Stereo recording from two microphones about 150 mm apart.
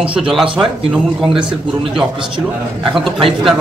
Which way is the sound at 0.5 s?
5° right (ahead or behind).